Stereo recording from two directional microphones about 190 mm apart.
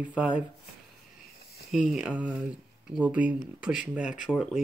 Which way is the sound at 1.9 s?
5° right (ahead or behind).